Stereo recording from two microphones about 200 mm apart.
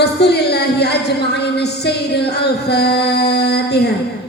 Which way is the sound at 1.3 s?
55° left (ahead or behind).